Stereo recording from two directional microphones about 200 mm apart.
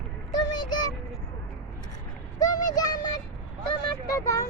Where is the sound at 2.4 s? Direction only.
20° left (ahead or behind).